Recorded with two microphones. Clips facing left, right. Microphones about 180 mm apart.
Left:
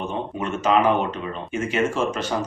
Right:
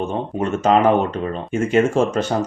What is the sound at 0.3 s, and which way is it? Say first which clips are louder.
Speech: right 4 dB; 45° right (ahead or behind).